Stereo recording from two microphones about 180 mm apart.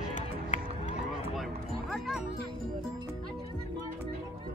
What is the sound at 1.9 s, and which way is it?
Music, centre (ahead or behind).